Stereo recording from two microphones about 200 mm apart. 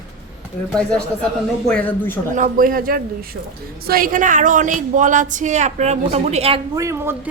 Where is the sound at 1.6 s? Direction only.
5° left (ahead or behind).